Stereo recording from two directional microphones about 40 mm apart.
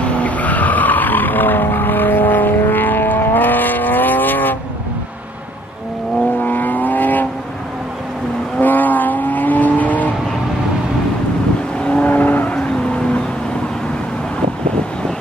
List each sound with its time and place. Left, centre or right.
0.0 s vehicle: left
6.4 s vehicle: left
8.5 s vehicle: left
12.0 s vehicle: left